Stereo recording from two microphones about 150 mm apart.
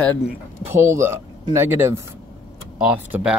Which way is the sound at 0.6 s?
20° right (ahead or behind).